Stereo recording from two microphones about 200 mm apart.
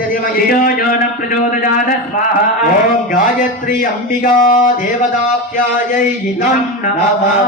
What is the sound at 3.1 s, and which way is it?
Speech, 40° left (ahead or behind).